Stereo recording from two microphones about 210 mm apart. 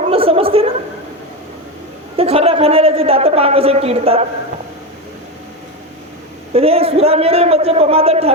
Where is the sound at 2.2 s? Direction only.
30° right (ahead or behind).